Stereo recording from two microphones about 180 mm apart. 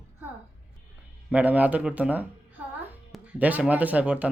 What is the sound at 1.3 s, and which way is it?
Speech, 10° right (ahead or behind).